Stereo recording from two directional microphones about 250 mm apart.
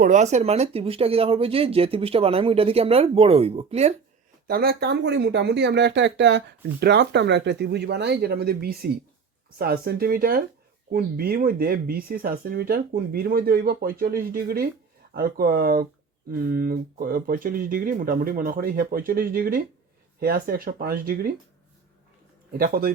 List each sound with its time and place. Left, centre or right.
0.0 s speech: right
4.4 s speech: right
22.5 s speech: right